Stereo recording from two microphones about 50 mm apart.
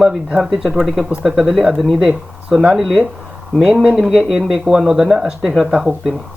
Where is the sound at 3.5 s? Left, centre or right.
Centre.